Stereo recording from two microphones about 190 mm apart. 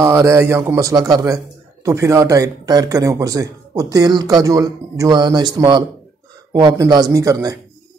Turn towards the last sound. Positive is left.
turn(degrees=-20)  # may be behind; listen again after turning